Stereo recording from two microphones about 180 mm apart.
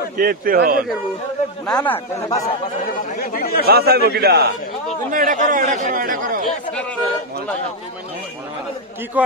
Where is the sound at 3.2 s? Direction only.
55° left (ahead or behind).